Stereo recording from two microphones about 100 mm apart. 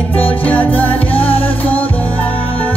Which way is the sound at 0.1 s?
15° left (ahead or behind).